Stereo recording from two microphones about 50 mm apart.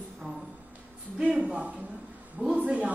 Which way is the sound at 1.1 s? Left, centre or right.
Right.